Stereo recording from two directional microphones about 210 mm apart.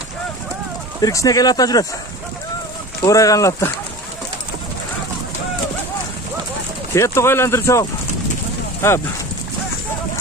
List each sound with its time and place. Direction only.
1.0 s speech: 15° left (ahead or behind)
3.0 s speech: 15° left (ahead or behind)
6.9 s speech: 10° left (ahead or behind)
8.8 s speech: 10° left (ahead or behind)